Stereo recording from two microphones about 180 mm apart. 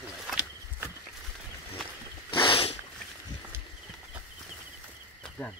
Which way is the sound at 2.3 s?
30° left (ahead or behind).